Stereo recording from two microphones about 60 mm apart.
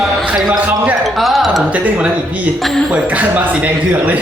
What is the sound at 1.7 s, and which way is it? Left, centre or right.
Speech, right.